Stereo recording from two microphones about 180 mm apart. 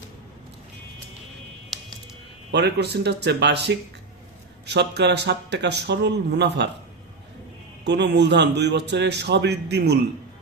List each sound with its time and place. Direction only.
2.5 s a man's voice: 70° right (ahead or behind)
7.9 s a man's voice: 70° right (ahead or behind)